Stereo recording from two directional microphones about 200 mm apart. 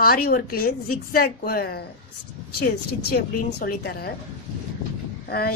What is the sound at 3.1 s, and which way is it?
Speech, 55° left (ahead or behind).